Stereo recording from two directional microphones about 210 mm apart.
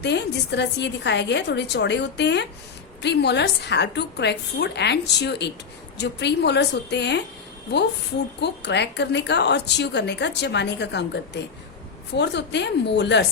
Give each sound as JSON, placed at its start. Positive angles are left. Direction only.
{"t": 0.0, "sound": "a woman's voice", "side_deg": 55}
{"t": 8.4, "sound": "a woman's voice", "side_deg": 55}